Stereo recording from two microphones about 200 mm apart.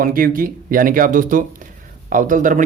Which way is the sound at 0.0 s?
45° right (ahead or behind).